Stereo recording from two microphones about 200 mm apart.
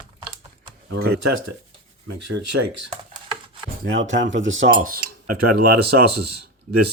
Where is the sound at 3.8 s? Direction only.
70° right (ahead or behind).